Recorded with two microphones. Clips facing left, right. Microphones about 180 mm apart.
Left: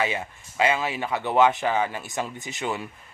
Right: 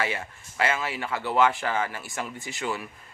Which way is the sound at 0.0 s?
20° left (ahead or behind).